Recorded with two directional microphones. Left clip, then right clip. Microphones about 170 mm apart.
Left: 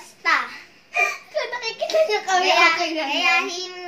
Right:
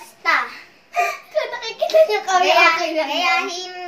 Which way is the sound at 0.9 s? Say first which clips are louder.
Right 2 dB; centre (ahead or behind).